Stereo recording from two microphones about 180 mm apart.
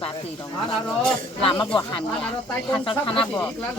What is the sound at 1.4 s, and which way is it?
Speech, 25° left (ahead or behind).